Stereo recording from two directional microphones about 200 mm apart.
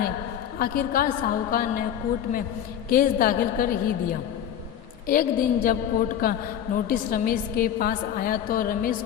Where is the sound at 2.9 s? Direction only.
45° left (ahead or behind).